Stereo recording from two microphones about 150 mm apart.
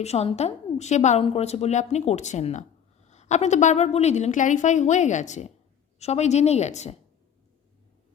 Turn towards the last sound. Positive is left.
turn(degrees=50)  # may be behind; listen again after turning